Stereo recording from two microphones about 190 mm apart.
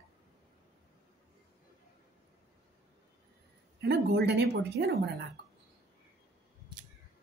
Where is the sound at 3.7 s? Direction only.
60° right (ahead or behind).